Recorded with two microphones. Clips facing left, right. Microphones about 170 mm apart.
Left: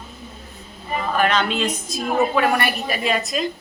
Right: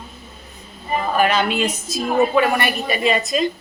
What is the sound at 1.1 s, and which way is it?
A woman's voice, 10° right (ahead or behind).